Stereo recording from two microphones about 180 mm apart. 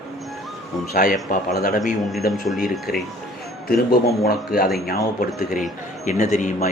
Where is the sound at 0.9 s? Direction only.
50° left (ahead or behind).